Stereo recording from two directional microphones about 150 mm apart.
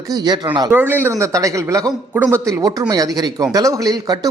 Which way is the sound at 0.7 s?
15° right (ahead or behind).